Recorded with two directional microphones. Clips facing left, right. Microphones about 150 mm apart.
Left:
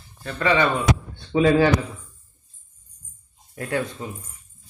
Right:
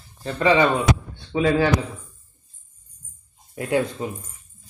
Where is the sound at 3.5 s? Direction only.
20° right (ahead or behind).